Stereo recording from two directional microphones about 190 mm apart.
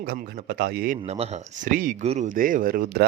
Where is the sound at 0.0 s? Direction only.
50° right (ahead or behind).